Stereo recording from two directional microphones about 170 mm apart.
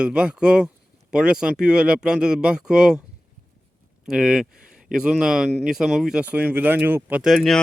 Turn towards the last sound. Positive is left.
turn(degrees=0)  # may be behind; listen again after turning